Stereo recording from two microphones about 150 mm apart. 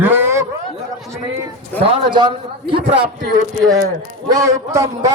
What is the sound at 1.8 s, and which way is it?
A man's voice, 30° right (ahead or behind).